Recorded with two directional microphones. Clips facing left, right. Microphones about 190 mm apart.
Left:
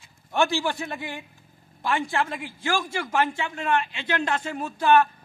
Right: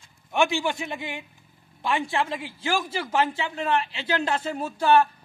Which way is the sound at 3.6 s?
30° right (ahead or behind).